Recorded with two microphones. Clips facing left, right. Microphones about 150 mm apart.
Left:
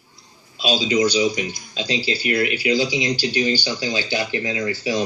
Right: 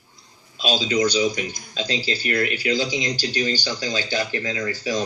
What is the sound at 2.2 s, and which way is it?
Speech, 10° left (ahead or behind).